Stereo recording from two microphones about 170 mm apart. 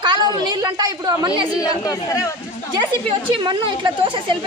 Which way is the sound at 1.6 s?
20° left (ahead or behind).